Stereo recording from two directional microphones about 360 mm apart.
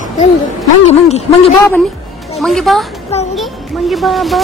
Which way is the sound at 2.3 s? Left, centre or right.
Centre.